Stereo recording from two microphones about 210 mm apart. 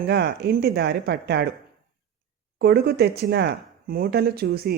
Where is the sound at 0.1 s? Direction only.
50° right (ahead or behind).